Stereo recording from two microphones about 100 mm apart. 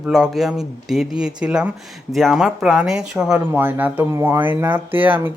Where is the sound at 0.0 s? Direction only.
5° right (ahead or behind).